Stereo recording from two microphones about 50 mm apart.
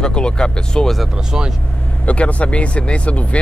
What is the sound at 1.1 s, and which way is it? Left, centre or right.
Speech, centre.